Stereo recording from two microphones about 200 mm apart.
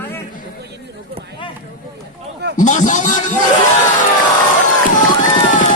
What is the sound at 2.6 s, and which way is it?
Speech, 40° left (ahead or behind).